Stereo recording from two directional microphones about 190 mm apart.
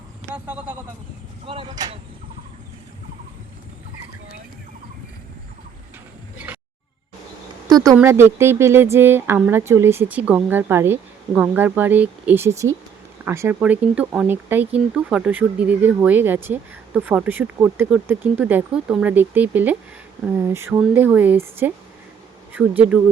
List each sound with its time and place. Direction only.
0.3 s speech: 10° right (ahead or behind)
1.5 s speech: 25° right (ahead or behind)
6.3 s music: 10° right (ahead or behind)
7.7 s speech: 20° right (ahead or behind)